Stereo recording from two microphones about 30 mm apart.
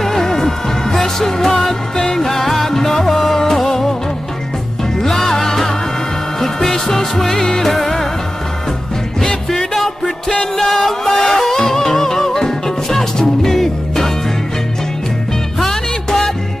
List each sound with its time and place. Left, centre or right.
0.0 s music: centre
5.0 s music: centre
10.4 s music: centre
15.6 s music: centre